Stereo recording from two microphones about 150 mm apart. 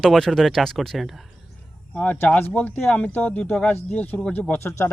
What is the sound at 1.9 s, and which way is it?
Speech, 10° left (ahead or behind).